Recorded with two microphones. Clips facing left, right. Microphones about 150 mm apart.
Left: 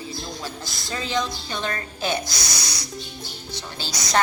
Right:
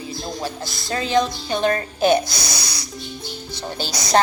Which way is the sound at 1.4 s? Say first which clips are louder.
Right 9 dB; 35° right (ahead or behind).